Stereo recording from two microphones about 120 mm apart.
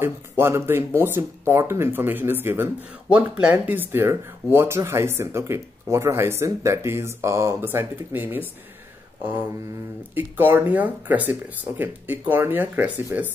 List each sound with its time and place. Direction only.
0.0 s speech: 20° right (ahead or behind)
10.1 s speech: 15° right (ahead or behind)